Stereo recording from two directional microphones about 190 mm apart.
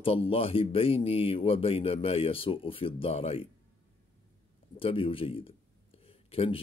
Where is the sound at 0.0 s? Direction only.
30° left (ahead or behind).